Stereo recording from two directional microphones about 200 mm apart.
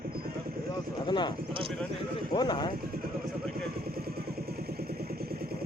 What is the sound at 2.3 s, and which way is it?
Speech, 20° left (ahead or behind).